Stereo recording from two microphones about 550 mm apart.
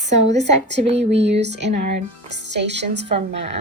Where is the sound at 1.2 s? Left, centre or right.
Centre.